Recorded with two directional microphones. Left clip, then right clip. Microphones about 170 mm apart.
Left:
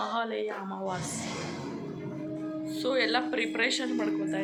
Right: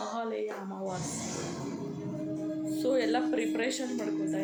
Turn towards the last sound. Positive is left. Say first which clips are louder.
# left 2 dB
turn(degrees=-25)  # may be behind; listen again after turning